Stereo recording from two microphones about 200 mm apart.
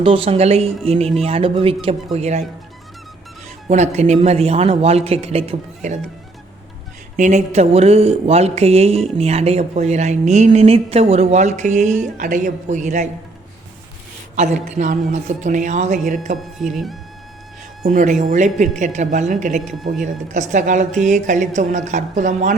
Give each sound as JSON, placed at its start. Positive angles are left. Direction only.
{"t": 0.0, "sound": "a man's voice", "side_deg": -25}
{"t": 3.7, "sound": "speech", "side_deg": -35}
{"t": 7.2, "sound": "speech", "side_deg": -35}
{"t": 14.3, "sound": "speech", "side_deg": -35}
{"t": 16.4, "sound": "speech", "side_deg": 0}
{"t": 17.8, "sound": "speech", "side_deg": -40}